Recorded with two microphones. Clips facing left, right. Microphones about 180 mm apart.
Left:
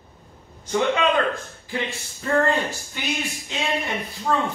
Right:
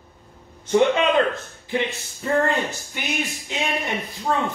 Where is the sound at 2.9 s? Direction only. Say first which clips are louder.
Right 1 dB; 15° right (ahead or behind).